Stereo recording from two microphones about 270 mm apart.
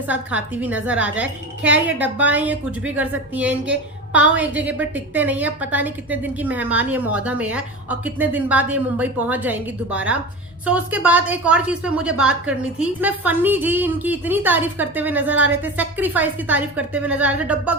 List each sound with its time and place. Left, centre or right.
0.1 s a woman's voice: centre